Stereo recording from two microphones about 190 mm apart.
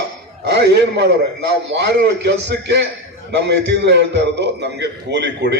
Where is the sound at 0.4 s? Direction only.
60° right (ahead or behind).